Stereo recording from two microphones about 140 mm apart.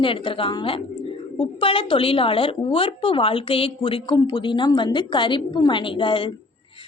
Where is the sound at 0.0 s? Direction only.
40° left (ahead or behind).